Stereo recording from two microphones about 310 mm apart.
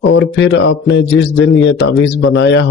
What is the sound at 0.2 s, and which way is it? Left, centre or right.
Speech, left.